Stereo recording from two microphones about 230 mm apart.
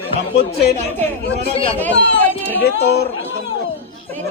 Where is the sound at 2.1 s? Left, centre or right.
Centre.